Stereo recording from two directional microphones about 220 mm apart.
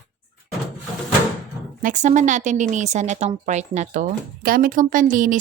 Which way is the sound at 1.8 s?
35° right (ahead or behind).